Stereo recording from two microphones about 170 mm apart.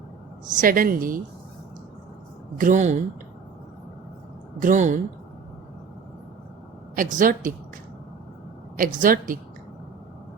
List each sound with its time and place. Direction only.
0.5 s a woman's voice: 55° right (ahead or behind)
2.6 s a woman's voice: 50° right (ahead or behind)
4.6 s a woman's voice: 45° right (ahead or behind)
6.9 s a woman's voice: 50° right (ahead or behind)
8.7 s a woman's voice: 55° right (ahead or behind)